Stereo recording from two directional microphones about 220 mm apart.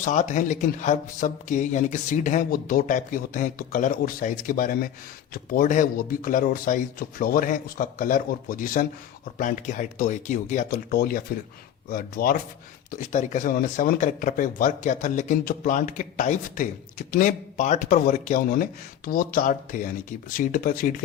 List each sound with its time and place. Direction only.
0.0 s speech: 35° left (ahead or behind)